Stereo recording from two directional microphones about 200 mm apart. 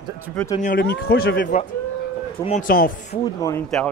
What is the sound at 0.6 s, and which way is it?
A man's voice, 40° left (ahead or behind).